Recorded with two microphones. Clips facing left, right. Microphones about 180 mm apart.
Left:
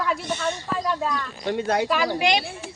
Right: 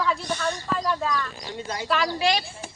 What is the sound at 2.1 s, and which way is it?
Speech, 20° left (ahead or behind).